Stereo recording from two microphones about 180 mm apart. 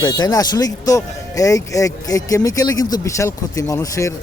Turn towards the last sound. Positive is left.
turn(degrees=15)  # may be behind; listen again after turning